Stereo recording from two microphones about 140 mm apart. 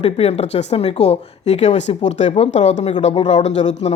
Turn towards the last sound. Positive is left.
turn(degrees=55)  # may be behind; listen again after turning